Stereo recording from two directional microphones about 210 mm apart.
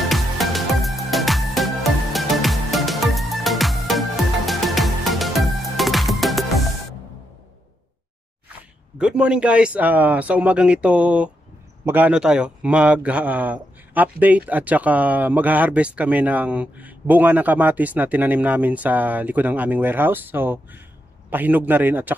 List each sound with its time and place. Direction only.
0.1 s music: centre (ahead or behind)
8.9 s a man's voice: 5° right (ahead or behind)